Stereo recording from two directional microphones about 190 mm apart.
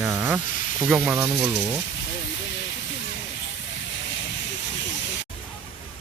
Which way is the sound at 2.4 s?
70° left (ahead or behind).